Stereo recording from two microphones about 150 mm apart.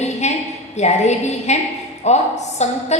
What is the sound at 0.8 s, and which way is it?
A woman's voice, 50° left (ahead or behind).